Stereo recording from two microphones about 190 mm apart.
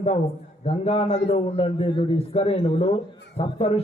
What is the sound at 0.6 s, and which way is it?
A man's voice, 30° left (ahead or behind).